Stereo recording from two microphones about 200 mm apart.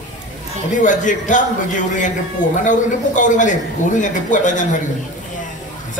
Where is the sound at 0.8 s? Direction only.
40° left (ahead or behind).